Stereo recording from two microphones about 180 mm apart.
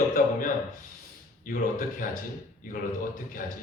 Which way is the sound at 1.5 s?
50° left (ahead or behind).